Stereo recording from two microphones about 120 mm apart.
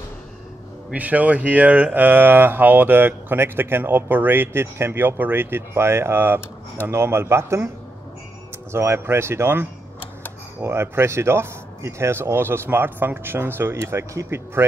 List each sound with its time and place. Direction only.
0.9 s speech: 10° right (ahead or behind)
8.7 s speech: 20° right (ahead or behind)